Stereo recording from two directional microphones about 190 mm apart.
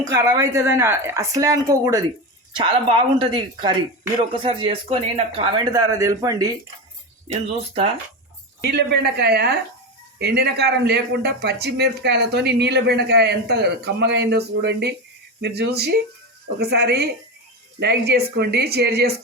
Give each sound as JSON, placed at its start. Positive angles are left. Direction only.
{"t": 0.1, "sound": "speech", "side_deg": -15}
{"t": 8.6, "sound": "speech", "side_deg": -60}